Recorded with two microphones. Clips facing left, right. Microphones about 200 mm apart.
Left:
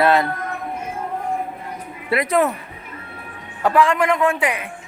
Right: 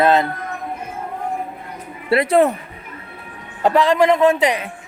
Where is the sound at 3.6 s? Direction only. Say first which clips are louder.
Right 3 dB; 20° right (ahead or behind).